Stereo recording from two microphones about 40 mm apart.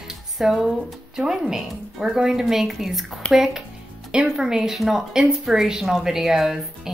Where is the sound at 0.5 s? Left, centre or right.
Centre.